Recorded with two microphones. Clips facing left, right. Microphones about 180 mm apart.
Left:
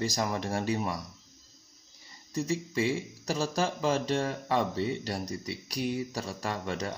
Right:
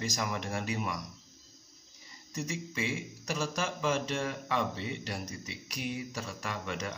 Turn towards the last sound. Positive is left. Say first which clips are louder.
# left 4 dB
turn(degrees=35)  # may be behind; listen again after turning